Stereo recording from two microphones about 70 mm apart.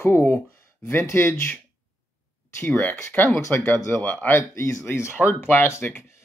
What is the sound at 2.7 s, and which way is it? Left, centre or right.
Speech, left.